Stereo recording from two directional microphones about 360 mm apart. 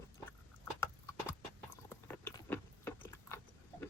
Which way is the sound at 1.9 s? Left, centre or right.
Centre.